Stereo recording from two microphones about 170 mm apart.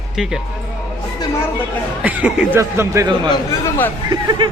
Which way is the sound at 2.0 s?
10° right (ahead or behind).